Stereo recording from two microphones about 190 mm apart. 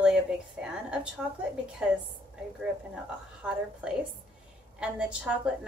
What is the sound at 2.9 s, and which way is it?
A woman's voice, 5° right (ahead or behind).